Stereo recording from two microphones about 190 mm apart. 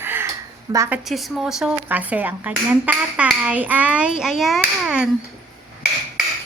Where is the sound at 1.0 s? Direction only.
Centre (ahead or behind).